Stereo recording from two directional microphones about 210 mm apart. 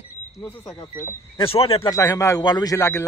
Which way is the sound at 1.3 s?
25° left (ahead or behind).